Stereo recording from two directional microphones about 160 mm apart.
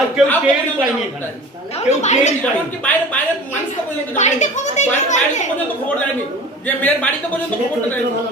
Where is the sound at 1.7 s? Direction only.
45° left (ahead or behind).